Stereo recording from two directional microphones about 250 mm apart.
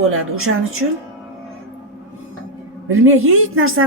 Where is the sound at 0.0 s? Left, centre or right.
Right.